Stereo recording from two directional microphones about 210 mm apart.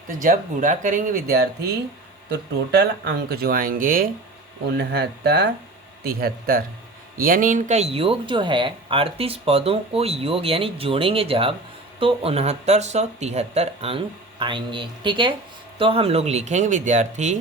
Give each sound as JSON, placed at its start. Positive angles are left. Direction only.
{"t": 0.1, "sound": "speech", "side_deg": -40}
{"t": 2.3, "sound": "speech", "side_deg": -55}